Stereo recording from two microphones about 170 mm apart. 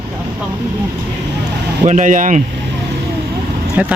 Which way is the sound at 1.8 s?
45° right (ahead or behind).